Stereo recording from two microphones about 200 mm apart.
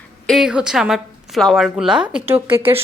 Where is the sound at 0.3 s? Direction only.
Centre (ahead or behind).